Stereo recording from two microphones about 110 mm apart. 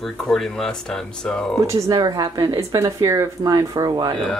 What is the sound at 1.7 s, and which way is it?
Speech, 30° right (ahead or behind).